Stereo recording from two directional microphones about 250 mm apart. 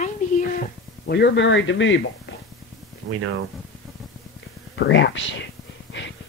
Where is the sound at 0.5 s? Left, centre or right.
Left.